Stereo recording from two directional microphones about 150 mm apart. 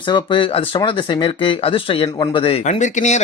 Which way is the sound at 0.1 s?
35° left (ahead or behind).